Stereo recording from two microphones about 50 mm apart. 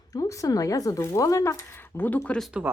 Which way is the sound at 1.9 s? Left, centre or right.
Left.